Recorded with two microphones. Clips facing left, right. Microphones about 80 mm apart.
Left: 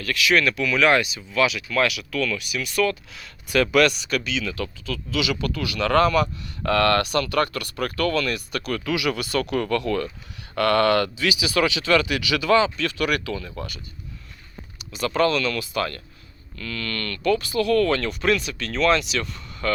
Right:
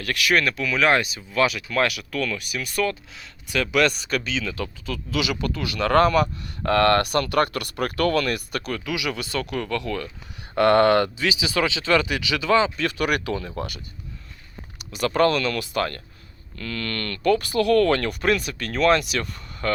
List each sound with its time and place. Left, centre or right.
0.0 s speech: right
3.5 s speech: centre
4.1 s speech: right
5.5 s speech: right
8.7 s speech: centre
10.5 s speech: right
11.2 s speech: centre
13.0 s speech: centre
13.6 s speech: right
14.8 s speech: right
17.3 s speech: right